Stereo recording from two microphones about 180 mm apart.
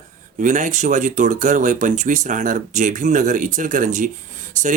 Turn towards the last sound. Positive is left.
turn(degrees=-45)  # may be behind; listen again after turning